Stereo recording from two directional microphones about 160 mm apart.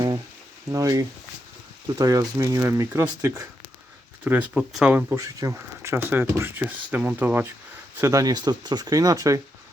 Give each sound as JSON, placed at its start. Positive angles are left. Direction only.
{"t": 0.7, "sound": "speech", "side_deg": -20}